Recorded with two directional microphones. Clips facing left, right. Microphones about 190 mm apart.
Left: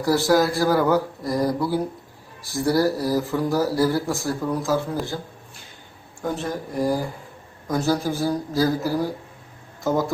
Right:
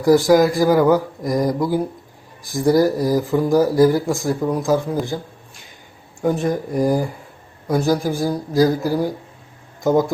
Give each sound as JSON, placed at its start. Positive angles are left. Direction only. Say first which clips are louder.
{"t": 0.0, "sound": "speech", "louder": "right 6 dB", "side_deg": -15}
{"t": 6.2, "sound": "speech", "louder": "right 7 dB", "side_deg": -15}